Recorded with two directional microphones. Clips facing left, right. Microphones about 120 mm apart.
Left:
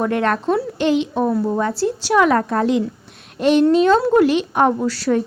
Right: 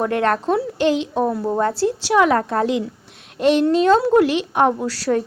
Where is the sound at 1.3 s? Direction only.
15° right (ahead or behind).